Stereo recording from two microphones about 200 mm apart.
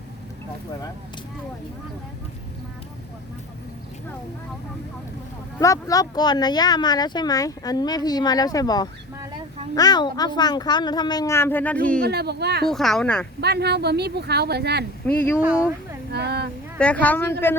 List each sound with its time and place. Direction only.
5.5 s speech: 15° left (ahead or behind)
12.0 s speech: 55° right (ahead or behind)
12.6 s speech: centre (ahead or behind)
13.4 s speech: 55° right (ahead or behind)
15.1 s speech: 5° left (ahead or behind)
15.4 s speech: 10° right (ahead or behind)
16.1 s speech: 55° right (ahead or behind)
16.7 s speech: 5° left (ahead or behind)